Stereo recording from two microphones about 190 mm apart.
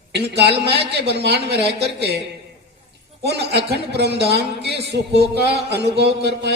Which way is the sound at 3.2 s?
60° right (ahead or behind).